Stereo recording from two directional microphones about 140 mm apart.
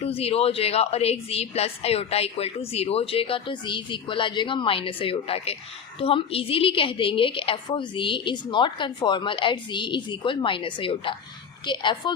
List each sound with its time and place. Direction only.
0.0 s a woman's voice: 45° left (ahead or behind)